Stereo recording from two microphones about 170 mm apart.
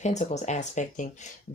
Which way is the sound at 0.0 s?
40° left (ahead or behind).